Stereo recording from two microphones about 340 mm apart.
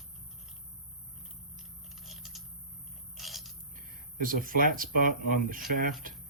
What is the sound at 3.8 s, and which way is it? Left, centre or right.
Speech, right.